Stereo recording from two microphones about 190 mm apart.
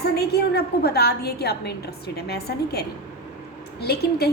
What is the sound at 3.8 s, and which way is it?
Speech, 55° left (ahead or behind).